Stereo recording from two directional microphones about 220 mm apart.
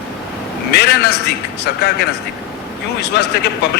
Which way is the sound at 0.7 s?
50° left (ahead or behind).